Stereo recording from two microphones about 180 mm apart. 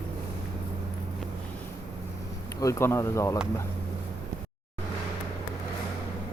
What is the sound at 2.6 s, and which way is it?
Speech, 15° left (ahead or behind).